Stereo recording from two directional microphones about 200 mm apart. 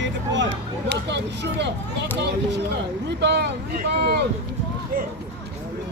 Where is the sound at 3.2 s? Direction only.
60° right (ahead or behind).